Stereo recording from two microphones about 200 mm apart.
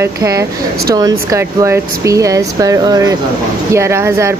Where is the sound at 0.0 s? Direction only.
15° right (ahead or behind).